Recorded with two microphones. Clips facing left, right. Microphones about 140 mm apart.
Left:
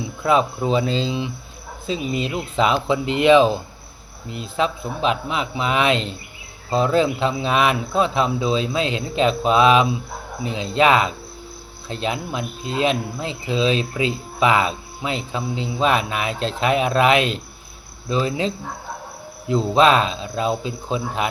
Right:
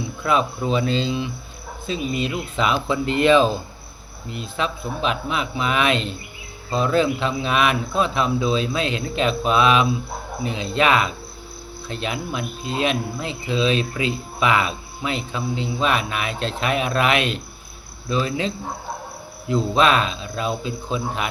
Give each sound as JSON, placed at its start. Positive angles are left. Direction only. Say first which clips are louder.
{"t": 0.2, "sound": "speech", "louder": "left 3 dB", "side_deg": 25}
{"t": 4.4, "sound": "speech", "louder": "left 3 dB", "side_deg": 30}